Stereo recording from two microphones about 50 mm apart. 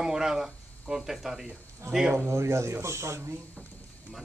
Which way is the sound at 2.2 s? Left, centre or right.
Right.